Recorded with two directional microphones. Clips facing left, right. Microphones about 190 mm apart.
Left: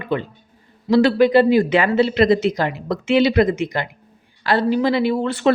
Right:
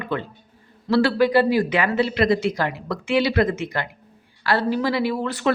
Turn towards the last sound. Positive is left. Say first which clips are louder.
# left 4 dB
turn(degrees=25)  # may be behind; listen again after turning